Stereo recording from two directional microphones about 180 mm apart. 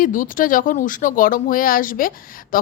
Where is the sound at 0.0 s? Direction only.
50° left (ahead or behind).